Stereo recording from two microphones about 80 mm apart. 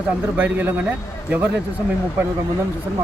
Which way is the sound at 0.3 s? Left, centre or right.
Centre.